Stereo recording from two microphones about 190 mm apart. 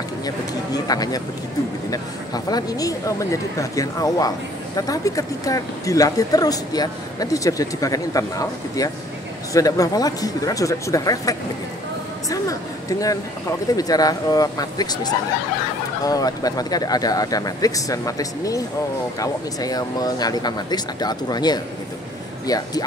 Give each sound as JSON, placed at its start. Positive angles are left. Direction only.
{"t": 0.8, "sound": "speech", "side_deg": 20}
{"t": 13.7, "sound": "speech", "side_deg": 20}